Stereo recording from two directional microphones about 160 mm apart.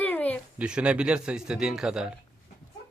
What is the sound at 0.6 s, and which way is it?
A man's voice, 5° right (ahead or behind).